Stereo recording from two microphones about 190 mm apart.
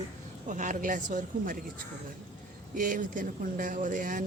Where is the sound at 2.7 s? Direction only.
45° right (ahead or behind).